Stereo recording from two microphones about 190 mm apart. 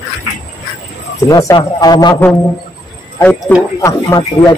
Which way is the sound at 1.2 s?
20° left (ahead or behind).